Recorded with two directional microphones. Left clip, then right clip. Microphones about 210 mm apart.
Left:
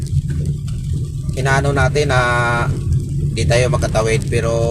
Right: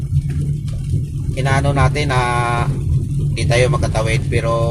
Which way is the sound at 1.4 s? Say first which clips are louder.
Left 1 dB; 15° left (ahead or behind).